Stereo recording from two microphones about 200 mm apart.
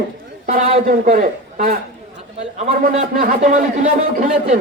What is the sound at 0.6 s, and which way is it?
Speech, 30° right (ahead or behind).